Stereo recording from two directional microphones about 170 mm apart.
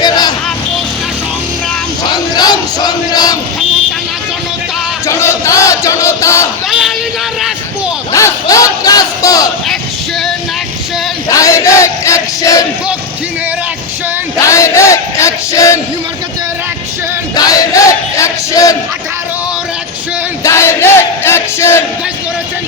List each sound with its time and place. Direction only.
0.0 s vehicle: 25° left (ahead or behind)
2.1 s crowd: 25° left (ahead or behind)
5.0 s battle cry: 15° left (ahead or behind)
6.7 s a sound: centre (ahead or behind)
8.1 s a sound: 20° left (ahead or behind)
11.3 s crowd: 20° left (ahead or behind)
14.4 s crowd: 15° left (ahead or behind)
17.3 s battle cry: 20° left (ahead or behind)
20.4 s crowd: 15° left (ahead or behind)